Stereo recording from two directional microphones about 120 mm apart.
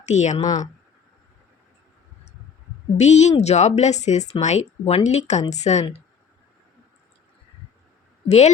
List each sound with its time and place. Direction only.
0.0 s speech: 75° left (ahead or behind)
0.3 s speech: 35° left (ahead or behind)
3.0 s a woman's voice: 70° left (ahead or behind)
8.3 s a woman's voice: 70° left (ahead or behind)